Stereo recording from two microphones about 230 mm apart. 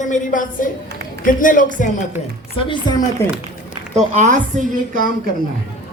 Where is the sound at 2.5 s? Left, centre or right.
Left.